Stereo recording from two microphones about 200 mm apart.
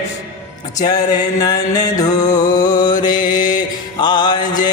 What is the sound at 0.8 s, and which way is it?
Music, 20° left (ahead or behind).